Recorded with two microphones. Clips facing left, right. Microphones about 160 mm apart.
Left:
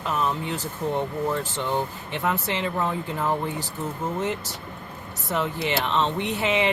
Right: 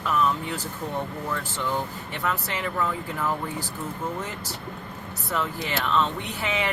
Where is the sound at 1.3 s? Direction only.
20° left (ahead or behind).